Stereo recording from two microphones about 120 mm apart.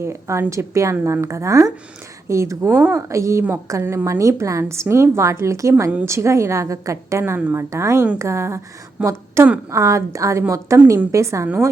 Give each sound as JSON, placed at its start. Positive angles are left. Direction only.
{"t": 0.0, "sound": "a woman's voice", "side_deg": -20}